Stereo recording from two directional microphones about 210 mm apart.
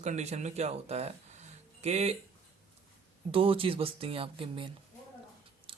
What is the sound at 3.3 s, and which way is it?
Speech, 25° right (ahead or behind).